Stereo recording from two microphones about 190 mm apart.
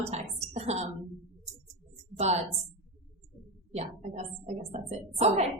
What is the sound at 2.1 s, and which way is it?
Speech, 35° right (ahead or behind).